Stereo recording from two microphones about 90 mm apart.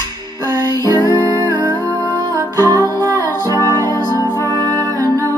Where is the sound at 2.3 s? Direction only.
35° left (ahead or behind).